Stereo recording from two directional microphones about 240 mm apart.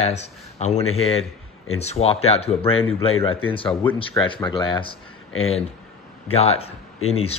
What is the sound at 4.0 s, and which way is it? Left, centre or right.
Speech, left.